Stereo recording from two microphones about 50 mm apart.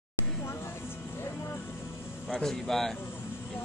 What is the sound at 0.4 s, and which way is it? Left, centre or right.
Music, left.